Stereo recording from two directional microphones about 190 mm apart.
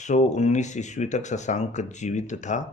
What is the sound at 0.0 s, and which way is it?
Speech, 40° left (ahead or behind).